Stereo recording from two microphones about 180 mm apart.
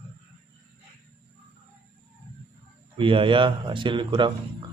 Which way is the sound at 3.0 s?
30° right (ahead or behind).